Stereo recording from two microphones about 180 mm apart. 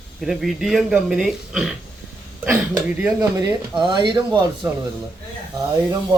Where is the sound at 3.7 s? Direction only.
25° right (ahead or behind).